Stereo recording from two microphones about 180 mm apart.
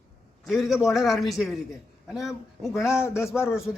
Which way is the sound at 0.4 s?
Centre (ahead or behind).